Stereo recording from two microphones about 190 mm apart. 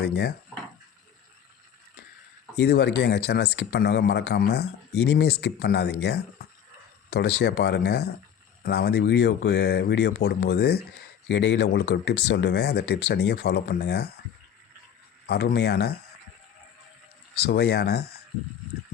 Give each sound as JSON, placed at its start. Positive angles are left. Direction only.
{"t": 0.0, "sound": "speech", "side_deg": 60}
{"t": 2.6, "sound": "speech", "side_deg": 60}
{"t": 11.3, "sound": "speech", "side_deg": 70}
{"t": 15.3, "sound": "speech", "side_deg": 60}
{"t": 17.3, "sound": "speech", "side_deg": 60}